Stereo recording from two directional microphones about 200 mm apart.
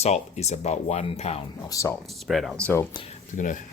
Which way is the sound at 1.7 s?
15° left (ahead or behind).